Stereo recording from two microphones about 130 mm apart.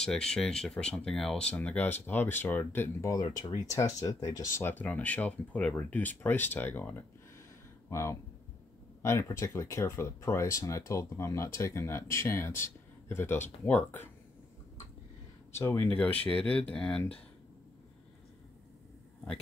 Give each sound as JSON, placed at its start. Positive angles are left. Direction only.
{"t": 0.0, "sound": "speech", "side_deg": 5}
{"t": 3.1, "sound": "speech", "side_deg": 30}
{"t": 15.5, "sound": "speech", "side_deg": 20}
{"t": 16.3, "sound": "speech", "side_deg": 10}